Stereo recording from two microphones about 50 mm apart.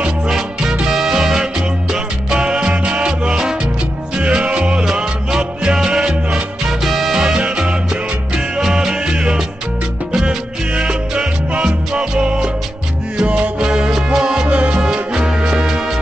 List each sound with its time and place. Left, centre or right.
0.8 s music: centre
6.8 s music: centre
10.8 s music: centre